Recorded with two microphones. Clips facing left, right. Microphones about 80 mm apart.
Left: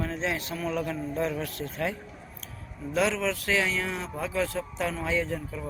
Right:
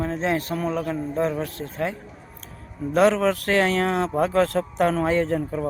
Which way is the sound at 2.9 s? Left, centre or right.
Right.